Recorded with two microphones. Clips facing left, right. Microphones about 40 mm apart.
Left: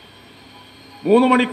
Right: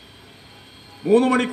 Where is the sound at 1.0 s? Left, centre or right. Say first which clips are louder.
Left 3 dB; left.